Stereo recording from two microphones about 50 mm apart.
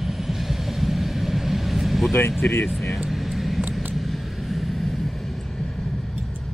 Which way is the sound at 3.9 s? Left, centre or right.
Centre.